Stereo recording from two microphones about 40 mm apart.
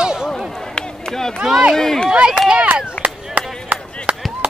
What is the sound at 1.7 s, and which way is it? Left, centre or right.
Speech, centre.